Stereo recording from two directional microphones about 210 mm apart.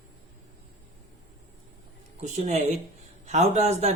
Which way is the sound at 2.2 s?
35° right (ahead or behind).